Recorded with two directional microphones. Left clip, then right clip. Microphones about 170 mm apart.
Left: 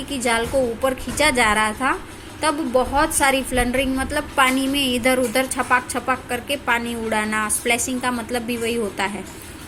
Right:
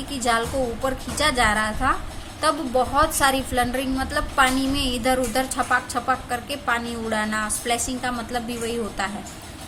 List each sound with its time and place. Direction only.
0.1 s a woman's voice: 15° left (ahead or behind)